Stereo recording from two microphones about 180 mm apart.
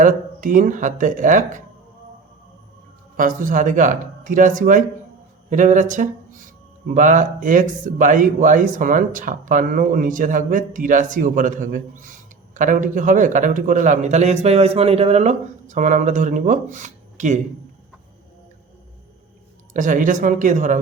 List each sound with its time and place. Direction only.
0.0 s speech: 45° right (ahead or behind)
3.2 s speech: 50° right (ahead or behind)
19.7 s speech: 45° right (ahead or behind)